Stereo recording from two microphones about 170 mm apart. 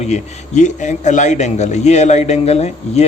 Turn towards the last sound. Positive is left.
turn(degrees=40)  # may be behind; listen again after turning